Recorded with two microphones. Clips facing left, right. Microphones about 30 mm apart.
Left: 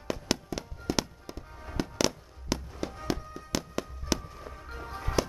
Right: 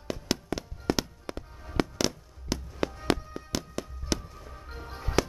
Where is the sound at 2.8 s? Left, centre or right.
Right.